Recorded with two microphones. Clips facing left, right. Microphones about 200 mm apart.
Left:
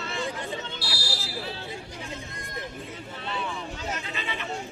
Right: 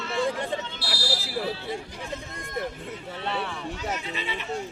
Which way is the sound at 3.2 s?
70° right (ahead or behind).